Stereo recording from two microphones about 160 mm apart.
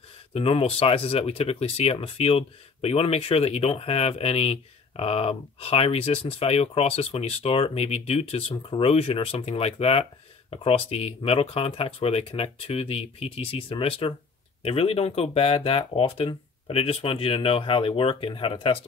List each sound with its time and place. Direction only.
0.3 s speech: 35° left (ahead or behind)